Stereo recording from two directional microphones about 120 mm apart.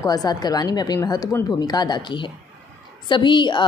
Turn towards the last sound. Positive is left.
turn(degrees=40)  # may be behind; listen again after turning